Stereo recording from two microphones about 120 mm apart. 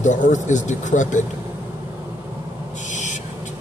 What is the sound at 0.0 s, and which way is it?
Speech, 90° left.